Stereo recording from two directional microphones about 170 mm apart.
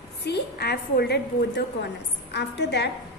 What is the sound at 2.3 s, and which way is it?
Speech, 85° left.